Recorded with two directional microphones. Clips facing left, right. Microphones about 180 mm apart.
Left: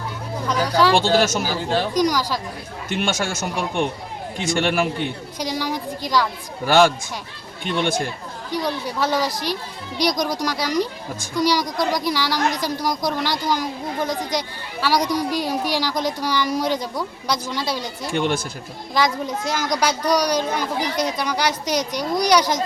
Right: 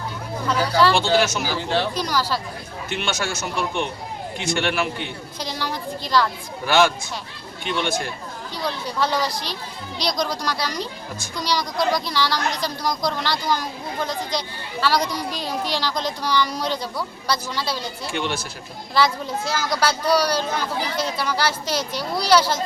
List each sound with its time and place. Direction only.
0.4 s a sound: 15° left (ahead or behind)
0.9 s speech: 50° left (ahead or behind)
1.9 s a woman's voice: 15° left (ahead or behind)
2.9 s speech: 50° left (ahead or behind)
5.4 s a woman's voice: 10° left (ahead or behind)
6.7 s speech: 45° left (ahead or behind)
8.4 s a woman's voice: 15° left (ahead or behind)
18.1 s speech: 50° left (ahead or behind)
18.9 s a woman's voice: 15° left (ahead or behind)